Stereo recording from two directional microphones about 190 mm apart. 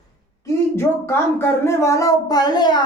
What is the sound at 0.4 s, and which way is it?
Speech, 15° left (ahead or behind).